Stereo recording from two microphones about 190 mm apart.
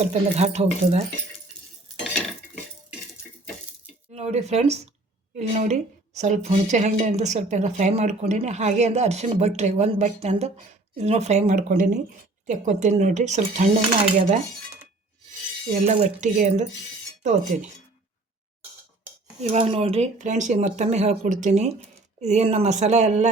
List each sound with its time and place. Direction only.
0.0 s a woman's voice: 35° right (ahead or behind)
4.1 s a woman's voice: 35° right (ahead or behind)
16.2 s a woman's voice: 40° right (ahead or behind)
19.4 s a woman's voice: 30° right (ahead or behind)